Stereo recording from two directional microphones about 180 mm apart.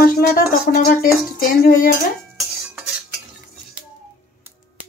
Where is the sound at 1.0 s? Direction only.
55° left (ahead or behind).